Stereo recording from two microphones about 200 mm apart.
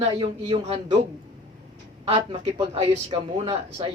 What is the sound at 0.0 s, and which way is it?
Speech, 25° right (ahead or behind).